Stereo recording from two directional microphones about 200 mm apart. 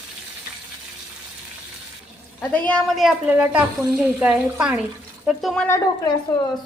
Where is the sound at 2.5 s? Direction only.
5° left (ahead or behind).